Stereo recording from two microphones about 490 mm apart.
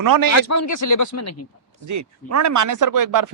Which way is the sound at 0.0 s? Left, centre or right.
Right.